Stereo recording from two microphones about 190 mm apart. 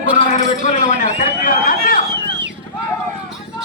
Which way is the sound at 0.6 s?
45° left (ahead or behind).